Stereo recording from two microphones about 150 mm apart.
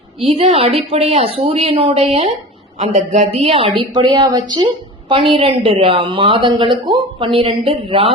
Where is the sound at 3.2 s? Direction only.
40° right (ahead or behind).